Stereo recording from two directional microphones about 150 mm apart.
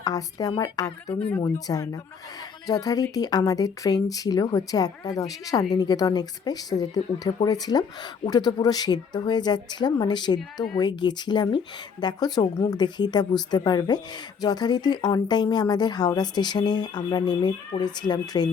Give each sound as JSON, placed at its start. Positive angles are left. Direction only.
{"t": 0.0, "sound": "speech", "side_deg": 25}